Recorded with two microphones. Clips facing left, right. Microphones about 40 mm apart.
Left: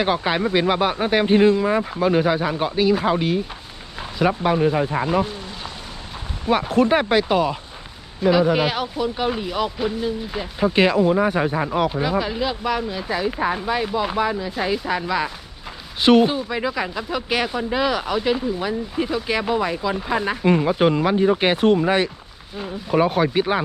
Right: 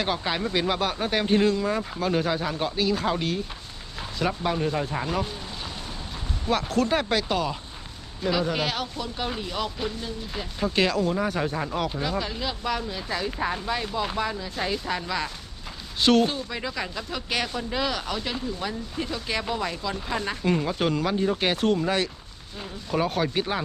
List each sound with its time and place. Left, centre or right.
0.0 s speech: left
6.5 s speech: left
10.8 s speech: left